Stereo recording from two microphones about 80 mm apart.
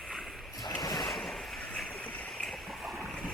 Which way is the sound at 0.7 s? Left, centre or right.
Left.